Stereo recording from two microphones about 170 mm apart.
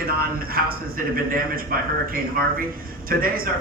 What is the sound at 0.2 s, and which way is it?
A man's voice, 60° right (ahead or behind).